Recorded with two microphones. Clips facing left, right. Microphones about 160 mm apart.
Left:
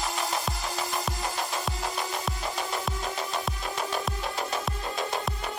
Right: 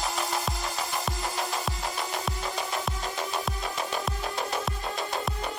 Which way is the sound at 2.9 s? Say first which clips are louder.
Even; centre (ahead or behind).